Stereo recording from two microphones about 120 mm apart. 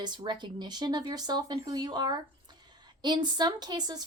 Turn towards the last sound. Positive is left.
turn(degrees=-35)  # may be behind; listen again after turning